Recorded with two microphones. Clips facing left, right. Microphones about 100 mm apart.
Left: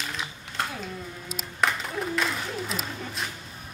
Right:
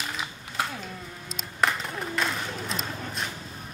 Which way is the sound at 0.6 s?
5° right (ahead or behind).